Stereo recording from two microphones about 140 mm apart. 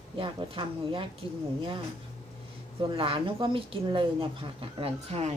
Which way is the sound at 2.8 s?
40° right (ahead or behind).